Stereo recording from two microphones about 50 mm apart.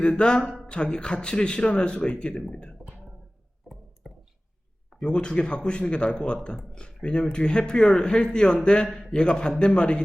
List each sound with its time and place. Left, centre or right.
0.0 s speech: centre
4.0 s a sound: centre
4.9 s speech: centre